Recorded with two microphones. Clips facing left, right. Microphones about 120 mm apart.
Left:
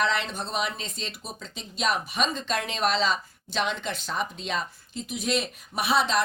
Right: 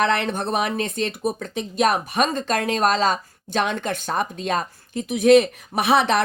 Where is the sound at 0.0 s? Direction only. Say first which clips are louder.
Right 6 dB; 60° right (ahead or behind).